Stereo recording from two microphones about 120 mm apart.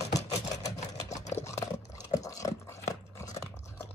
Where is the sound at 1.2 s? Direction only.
70° left (ahead or behind).